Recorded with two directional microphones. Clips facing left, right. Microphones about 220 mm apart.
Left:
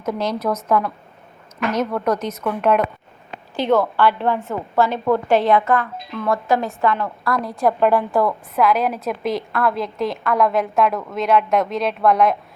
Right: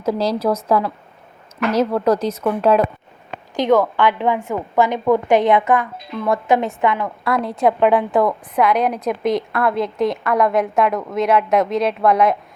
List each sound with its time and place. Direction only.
0.0 s speech: 30° right (ahead or behind)
3.5 s a woman's voice: 15° right (ahead or behind)
8.5 s a woman's voice: centre (ahead or behind)